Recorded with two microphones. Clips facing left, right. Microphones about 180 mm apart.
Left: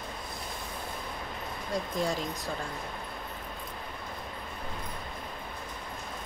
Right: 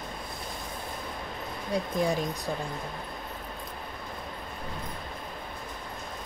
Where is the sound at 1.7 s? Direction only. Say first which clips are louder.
Right 3 dB; 15° right (ahead or behind).